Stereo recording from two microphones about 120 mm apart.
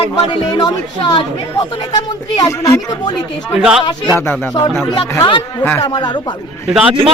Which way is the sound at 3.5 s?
5° right (ahead or behind).